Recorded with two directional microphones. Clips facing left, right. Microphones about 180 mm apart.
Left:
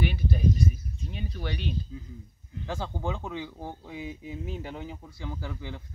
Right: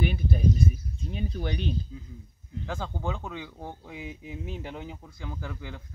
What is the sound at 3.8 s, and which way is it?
Speech, 10° right (ahead or behind).